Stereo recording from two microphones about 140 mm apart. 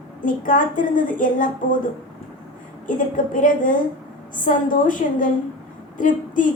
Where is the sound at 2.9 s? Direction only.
70° left (ahead or behind).